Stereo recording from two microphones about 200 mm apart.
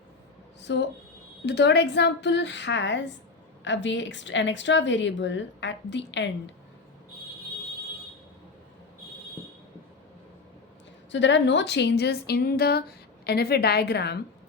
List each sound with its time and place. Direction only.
0.6 s a woman's voice: 60° left (ahead or behind)
11.1 s a woman's voice: 65° left (ahead or behind)